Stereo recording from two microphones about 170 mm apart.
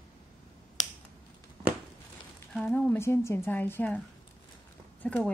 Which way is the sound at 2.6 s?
5° left (ahead or behind).